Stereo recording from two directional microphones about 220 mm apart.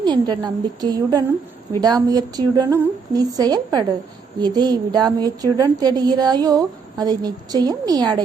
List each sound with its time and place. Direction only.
0.0 s a woman's voice: 20° right (ahead or behind)